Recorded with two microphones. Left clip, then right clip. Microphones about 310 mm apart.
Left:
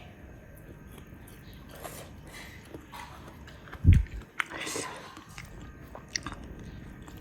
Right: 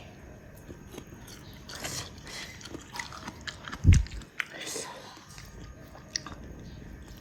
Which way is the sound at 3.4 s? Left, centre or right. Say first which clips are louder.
Right 2 dB; right.